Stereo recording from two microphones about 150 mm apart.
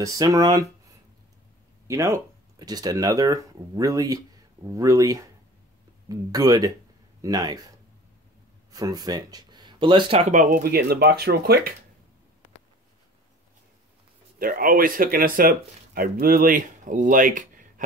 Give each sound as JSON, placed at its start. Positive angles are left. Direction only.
{"t": 0.0, "sound": "speech", "side_deg": -25}
{"t": 1.9, "sound": "speech", "side_deg": -20}
{"t": 8.7, "sound": "speech", "side_deg": -25}
{"t": 10.3, "sound": "speech", "side_deg": -60}
{"t": 14.4, "sound": "speech", "side_deg": -70}